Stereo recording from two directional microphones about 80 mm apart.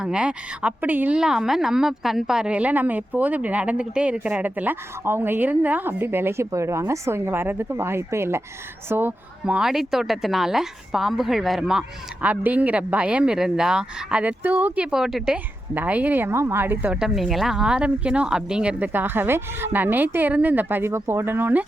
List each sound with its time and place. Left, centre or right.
0.0 s a woman's voice: centre
1.2 s a woman's voice: centre; by 9.6 s right
9.6 s a woman's voice: centre
15.7 s a woman's voice: right
16.9 s a woman's voice: centre
18.9 s a woman's voice: right